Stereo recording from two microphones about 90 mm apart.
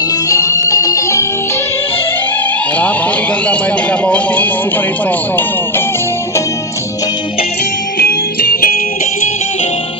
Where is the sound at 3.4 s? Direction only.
15° left (ahead or behind).